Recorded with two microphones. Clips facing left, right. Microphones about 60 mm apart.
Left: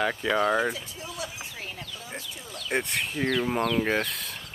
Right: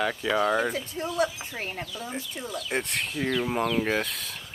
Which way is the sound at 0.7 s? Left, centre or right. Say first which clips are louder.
Right 10 dB; right.